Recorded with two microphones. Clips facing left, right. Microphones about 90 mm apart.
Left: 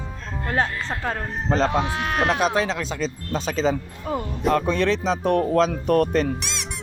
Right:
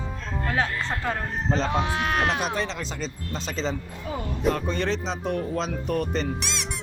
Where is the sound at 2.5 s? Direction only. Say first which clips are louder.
Left 5 dB; 90° left.